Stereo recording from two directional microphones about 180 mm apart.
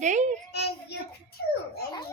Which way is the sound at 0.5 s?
65° left (ahead or behind).